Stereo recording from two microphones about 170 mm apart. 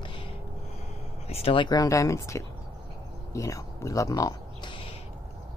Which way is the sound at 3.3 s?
20° left (ahead or behind).